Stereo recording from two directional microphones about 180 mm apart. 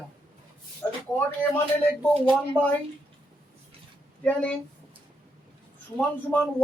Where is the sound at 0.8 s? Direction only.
10° left (ahead or behind).